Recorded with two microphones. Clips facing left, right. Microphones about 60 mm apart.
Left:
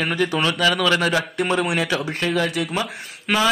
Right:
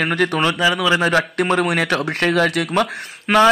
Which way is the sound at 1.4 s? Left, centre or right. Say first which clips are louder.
Right 3 dB; right.